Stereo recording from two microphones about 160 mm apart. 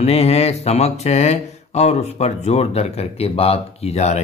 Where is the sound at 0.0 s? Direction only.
40° left (ahead or behind).